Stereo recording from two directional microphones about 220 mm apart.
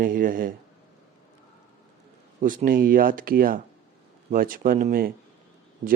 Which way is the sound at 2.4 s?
40° right (ahead or behind).